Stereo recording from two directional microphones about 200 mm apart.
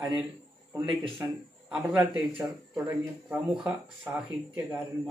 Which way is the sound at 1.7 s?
5° right (ahead or behind).